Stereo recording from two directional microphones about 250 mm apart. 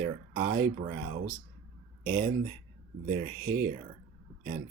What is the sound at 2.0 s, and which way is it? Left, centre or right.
Speech, right.